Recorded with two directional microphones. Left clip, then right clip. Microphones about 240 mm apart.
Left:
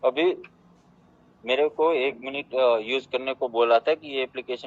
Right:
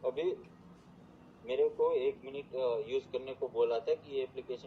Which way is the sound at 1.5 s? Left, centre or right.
Left.